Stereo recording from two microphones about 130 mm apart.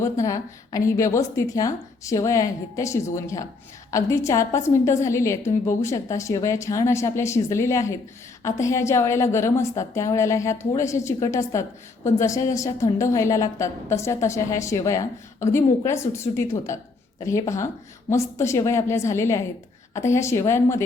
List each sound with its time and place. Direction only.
0.0 s a woman's voice: 25° left (ahead or behind)